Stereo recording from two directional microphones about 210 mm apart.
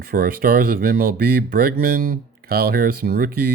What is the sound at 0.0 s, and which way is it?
Speech, 45° right (ahead or behind).